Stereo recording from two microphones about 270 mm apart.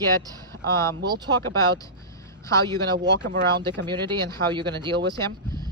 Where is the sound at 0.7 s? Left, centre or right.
Centre.